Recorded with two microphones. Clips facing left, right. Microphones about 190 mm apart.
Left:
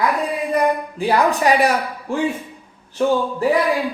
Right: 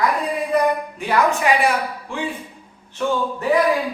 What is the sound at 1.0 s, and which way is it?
A woman's voice, 35° left (ahead or behind).